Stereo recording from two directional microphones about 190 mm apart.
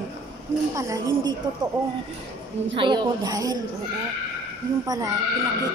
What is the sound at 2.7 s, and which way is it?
Speech, 25° right (ahead or behind).